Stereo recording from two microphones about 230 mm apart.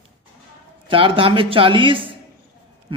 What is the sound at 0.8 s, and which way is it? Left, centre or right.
A man's voice, right.